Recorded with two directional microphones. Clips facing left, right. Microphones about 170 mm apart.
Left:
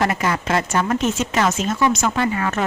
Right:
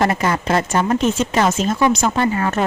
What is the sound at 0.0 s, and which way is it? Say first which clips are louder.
Speech: right 3 dB; 35° right (ahead or behind).